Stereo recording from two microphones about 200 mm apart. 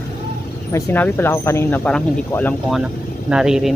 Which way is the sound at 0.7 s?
10° left (ahead or behind).